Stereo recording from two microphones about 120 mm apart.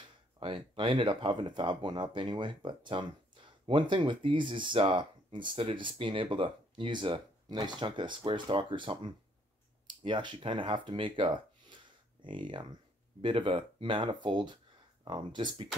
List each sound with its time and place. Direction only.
0.0 s speech: 45° right (ahead or behind)